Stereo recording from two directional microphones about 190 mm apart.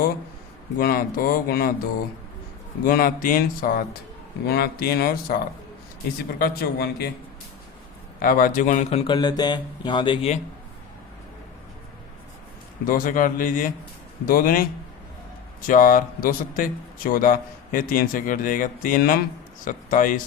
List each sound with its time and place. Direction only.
0.8 s speech: 50° left (ahead or behind)
2.8 s speech: 50° left (ahead or behind)
8.2 s speech: 45° left (ahead or behind)
12.8 s speech: 45° left (ahead or behind)
15.6 s speech: 45° left (ahead or behind)